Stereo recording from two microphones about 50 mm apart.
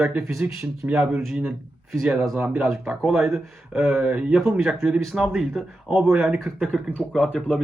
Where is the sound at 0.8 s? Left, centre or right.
Right.